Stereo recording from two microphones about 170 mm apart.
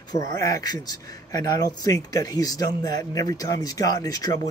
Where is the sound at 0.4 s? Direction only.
20° left (ahead or behind).